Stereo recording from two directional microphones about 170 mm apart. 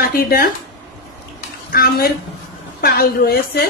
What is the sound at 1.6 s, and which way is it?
A woman's voice, 60° left (ahead or behind).